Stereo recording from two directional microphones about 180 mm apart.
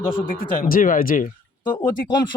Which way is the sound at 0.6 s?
50° left (ahead or behind).